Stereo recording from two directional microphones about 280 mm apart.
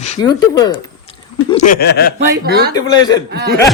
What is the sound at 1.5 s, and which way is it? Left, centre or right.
Speech, left.